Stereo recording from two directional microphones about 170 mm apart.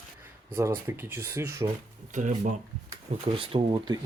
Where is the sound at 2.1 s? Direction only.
50° right (ahead or behind).